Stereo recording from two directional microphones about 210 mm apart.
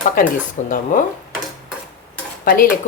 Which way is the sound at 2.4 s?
45° left (ahead or behind).